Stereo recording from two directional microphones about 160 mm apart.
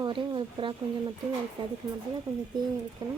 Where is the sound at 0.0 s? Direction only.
30° right (ahead or behind).